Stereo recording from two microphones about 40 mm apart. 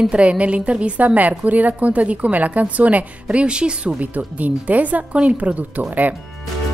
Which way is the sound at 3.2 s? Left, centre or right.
Right.